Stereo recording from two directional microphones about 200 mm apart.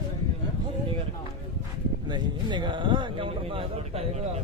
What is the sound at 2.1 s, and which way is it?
A man's voice, 25° right (ahead or behind).